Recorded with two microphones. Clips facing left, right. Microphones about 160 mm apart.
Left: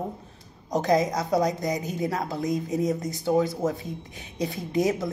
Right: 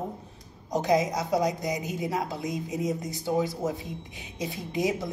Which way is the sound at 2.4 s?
40° left (ahead or behind).